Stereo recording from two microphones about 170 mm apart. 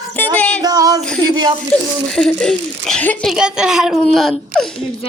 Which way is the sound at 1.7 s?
5° left (ahead or behind).